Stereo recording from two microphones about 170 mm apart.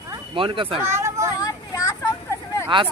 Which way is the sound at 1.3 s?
20° left (ahead or behind).